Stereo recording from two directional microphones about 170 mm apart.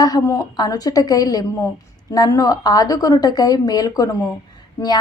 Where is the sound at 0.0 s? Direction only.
20° left (ahead or behind).